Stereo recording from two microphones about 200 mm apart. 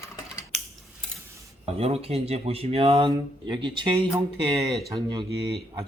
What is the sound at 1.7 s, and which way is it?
Speech, 30° right (ahead or behind).